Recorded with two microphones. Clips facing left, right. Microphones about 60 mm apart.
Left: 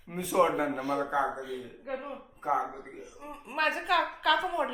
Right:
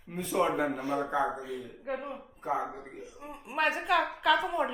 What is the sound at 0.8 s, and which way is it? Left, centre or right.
Speech, right.